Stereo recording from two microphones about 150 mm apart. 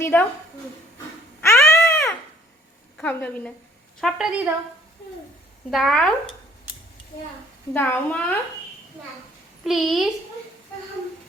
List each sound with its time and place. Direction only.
0.0 s a woman's voice: 15° left (ahead or behind)
1.4 s cat: 20° left (ahead or behind)
1.8 s crying: 15° left (ahead or behind)
3.0 s a woman's voice: 10° left (ahead or behind)
4.0 s a woman's voice: 5° right (ahead or behind)
5.7 s a woman's voice: 5° left (ahead or behind)
7.7 s a woman's voice: 10° left (ahead or behind)
9.6 s a woman's voice: centre (ahead or behind)